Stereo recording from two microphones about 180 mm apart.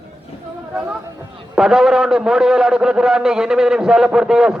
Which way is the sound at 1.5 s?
5° right (ahead or behind).